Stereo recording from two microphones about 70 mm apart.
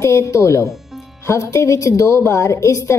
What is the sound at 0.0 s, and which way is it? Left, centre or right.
A woman's voice, left.